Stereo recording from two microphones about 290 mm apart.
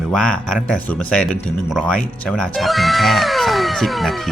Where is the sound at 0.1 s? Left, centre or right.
Centre.